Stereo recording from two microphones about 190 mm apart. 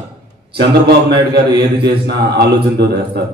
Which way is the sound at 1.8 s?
60° right (ahead or behind).